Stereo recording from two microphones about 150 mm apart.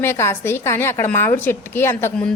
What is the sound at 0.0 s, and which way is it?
Speech, 15° left (ahead or behind).